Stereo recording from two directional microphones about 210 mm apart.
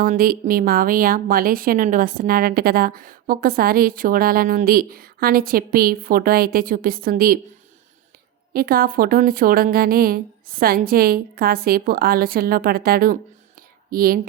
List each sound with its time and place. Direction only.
0.0 s a woman's voice: 45° right (ahead or behind)
8.5 s a woman's voice: 45° right (ahead or behind)
13.6 s whispering: 45° right (ahead or behind)